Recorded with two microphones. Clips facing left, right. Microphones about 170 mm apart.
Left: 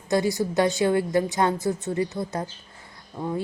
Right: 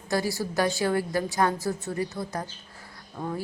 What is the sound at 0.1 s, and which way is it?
A woman's voice, 20° left (ahead or behind).